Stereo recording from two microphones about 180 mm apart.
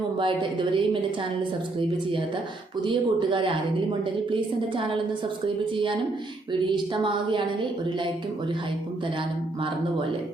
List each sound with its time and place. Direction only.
0.2 s a woman's voice: 25° right (ahead or behind)
2.8 s a woman's voice: 25° right (ahead or behind)
5.7 s a woman's voice: 30° right (ahead or behind)